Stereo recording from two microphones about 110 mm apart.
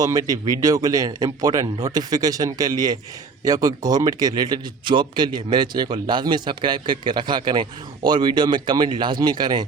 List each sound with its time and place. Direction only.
0.0 s speech: 30° right (ahead or behind)